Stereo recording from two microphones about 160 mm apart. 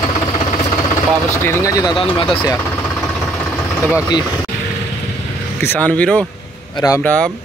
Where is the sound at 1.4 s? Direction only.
20° left (ahead or behind).